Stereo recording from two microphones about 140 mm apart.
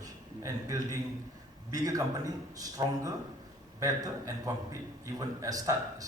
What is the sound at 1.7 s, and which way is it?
A man's voice, 25° right (ahead or behind).